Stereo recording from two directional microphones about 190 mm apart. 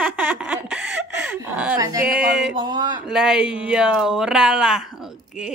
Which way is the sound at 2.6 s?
20° right (ahead or behind).